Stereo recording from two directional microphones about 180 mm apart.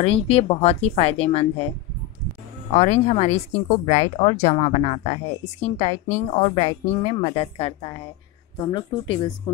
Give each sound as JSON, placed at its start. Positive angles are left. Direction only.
{"t": 0.0, "sound": "a woman's voice", "side_deg": 35}
{"t": 2.7, "sound": "a woman's voice", "side_deg": 40}